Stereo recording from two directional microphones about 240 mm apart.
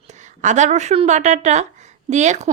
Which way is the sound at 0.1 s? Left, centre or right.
Right.